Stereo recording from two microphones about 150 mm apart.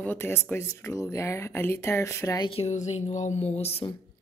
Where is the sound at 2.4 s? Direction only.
40° left (ahead or behind).